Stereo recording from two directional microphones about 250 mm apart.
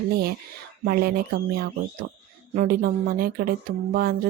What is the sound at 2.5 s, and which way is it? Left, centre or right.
Speech, right.